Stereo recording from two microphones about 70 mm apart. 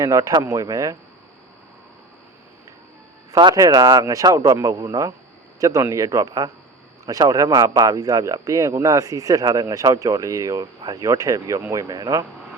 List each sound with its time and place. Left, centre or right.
0.0 s speech: right
3.3 s speech: right
3.6 s a man's voice: right
11.7 s speech: right